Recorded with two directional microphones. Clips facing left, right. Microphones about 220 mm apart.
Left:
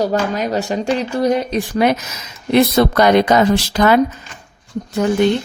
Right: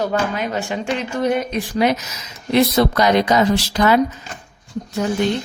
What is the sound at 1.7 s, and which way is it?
A woman's voice, 55° left (ahead or behind).